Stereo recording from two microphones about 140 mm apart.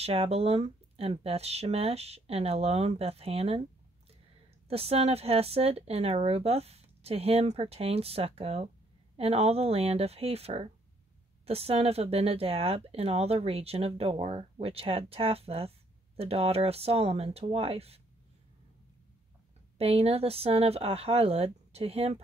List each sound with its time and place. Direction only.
0.0 s speech: 45° right (ahead or behind)
4.6 s speech: 45° right (ahead or behind)
19.8 s speech: 45° right (ahead or behind)